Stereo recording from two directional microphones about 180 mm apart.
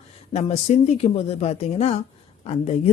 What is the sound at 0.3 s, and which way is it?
Speech, 35° left (ahead or behind).